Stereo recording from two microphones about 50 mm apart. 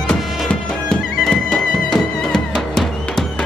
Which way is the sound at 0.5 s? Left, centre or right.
Left.